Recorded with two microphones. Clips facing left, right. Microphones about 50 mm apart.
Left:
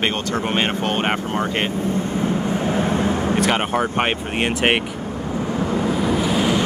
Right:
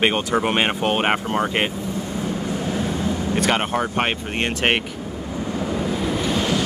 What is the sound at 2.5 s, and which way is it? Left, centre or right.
Vehicle, left.